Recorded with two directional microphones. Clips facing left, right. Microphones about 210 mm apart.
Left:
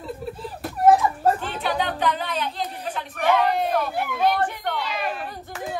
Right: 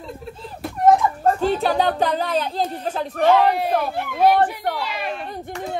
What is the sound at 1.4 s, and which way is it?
Speech, 40° right (ahead or behind).